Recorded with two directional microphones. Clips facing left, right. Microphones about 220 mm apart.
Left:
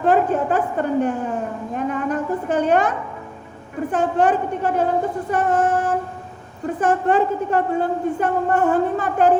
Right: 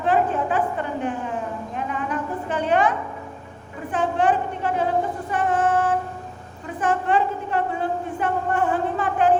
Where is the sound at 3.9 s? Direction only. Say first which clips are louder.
Left 3 dB; 45° left (ahead or behind).